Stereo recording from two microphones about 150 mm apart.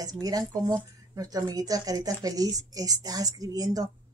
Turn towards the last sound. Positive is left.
turn(degrees=-25)  # may be behind; listen again after turning